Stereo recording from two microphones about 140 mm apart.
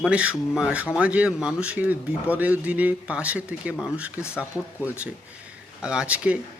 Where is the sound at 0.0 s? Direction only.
10° right (ahead or behind).